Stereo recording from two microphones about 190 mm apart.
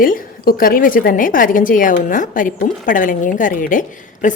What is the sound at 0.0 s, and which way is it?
A woman's voice, 50° left (ahead or behind).